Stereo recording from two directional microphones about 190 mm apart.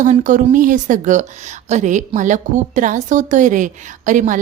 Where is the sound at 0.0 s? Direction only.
40° right (ahead or behind).